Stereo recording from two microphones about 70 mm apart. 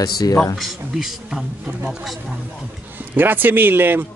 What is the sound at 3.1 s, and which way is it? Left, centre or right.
Speech, right.